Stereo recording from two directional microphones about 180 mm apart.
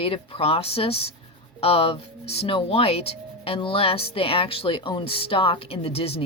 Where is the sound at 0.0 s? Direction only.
30° left (ahead or behind).